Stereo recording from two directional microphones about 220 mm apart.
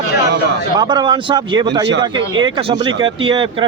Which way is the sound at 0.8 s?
20° right (ahead or behind).